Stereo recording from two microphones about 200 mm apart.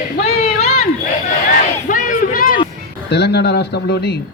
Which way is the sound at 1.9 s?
40° left (ahead or behind).